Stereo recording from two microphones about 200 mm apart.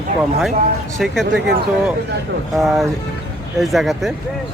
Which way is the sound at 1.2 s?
60° right (ahead or behind).